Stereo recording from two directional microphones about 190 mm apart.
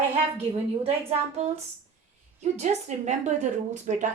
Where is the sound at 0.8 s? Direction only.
30° right (ahead or behind).